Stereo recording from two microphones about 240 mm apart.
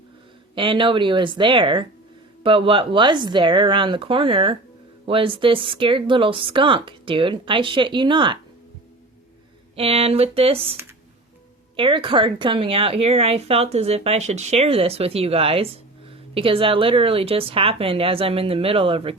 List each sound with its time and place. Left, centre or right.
0.5 s speech: centre
9.7 s speech: right
11.8 s speech: right